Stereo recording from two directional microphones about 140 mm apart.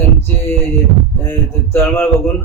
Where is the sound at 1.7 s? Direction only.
15° left (ahead or behind).